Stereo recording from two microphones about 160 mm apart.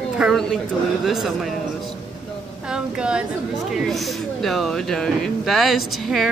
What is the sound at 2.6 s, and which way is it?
Speech, 5° right (ahead or behind).